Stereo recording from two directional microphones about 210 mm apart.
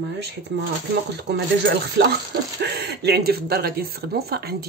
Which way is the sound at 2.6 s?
50° right (ahead or behind).